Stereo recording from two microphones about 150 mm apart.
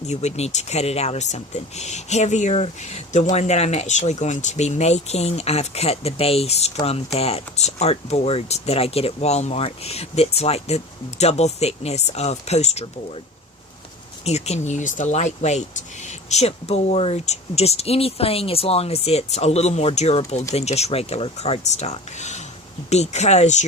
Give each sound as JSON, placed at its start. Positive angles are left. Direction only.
{"t": 0.1, "sound": "speech", "side_deg": 50}
{"t": 14.3, "sound": "speech", "side_deg": 45}